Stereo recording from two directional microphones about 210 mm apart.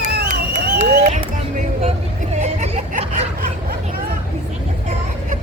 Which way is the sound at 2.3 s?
30° right (ahead or behind).